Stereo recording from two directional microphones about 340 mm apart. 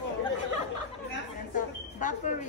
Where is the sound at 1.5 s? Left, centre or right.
Left.